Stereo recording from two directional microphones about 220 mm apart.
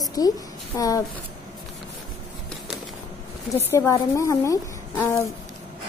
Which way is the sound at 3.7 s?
15° left (ahead or behind).